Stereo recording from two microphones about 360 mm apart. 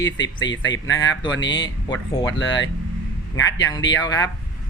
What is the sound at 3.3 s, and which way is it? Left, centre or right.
Speech, centre.